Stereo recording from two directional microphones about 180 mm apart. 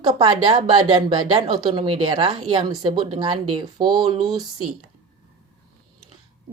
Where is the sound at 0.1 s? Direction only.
20° right (ahead or behind).